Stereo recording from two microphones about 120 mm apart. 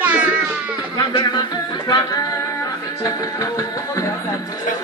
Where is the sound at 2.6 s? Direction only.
30° left (ahead or behind).